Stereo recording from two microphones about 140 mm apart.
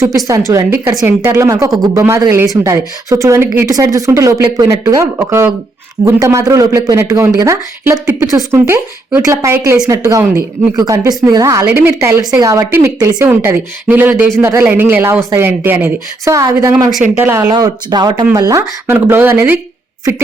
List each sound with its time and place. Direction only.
0.3 s speech: 25° right (ahead or behind)
17.5 s speech: 30° right (ahead or behind)